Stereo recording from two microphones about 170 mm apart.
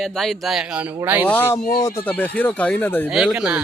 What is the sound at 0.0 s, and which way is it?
Speech, centre (ahead or behind).